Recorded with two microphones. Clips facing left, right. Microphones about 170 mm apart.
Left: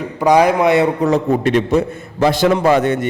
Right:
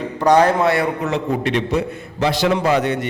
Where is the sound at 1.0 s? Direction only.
45° left (ahead or behind).